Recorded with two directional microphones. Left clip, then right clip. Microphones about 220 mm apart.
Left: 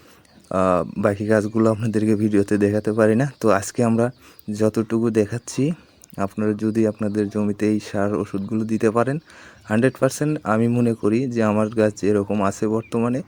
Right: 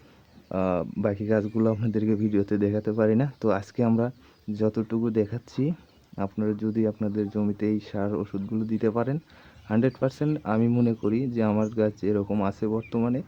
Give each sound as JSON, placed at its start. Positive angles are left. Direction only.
{"t": 0.4, "sound": "speech", "side_deg": 20}